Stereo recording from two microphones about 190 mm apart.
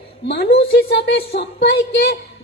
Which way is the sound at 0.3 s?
60° left (ahead or behind).